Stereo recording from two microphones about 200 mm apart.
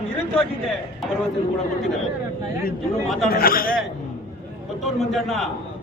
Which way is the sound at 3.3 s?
45° left (ahead or behind).